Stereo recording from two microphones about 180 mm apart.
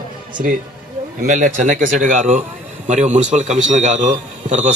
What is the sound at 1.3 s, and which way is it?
A man's voice, 45° right (ahead or behind).